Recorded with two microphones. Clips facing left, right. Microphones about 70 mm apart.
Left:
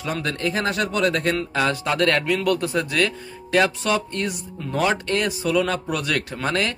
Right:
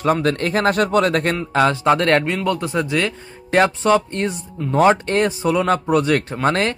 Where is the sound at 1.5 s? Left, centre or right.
Right.